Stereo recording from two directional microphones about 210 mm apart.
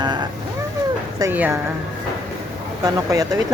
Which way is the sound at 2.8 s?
15° right (ahead or behind).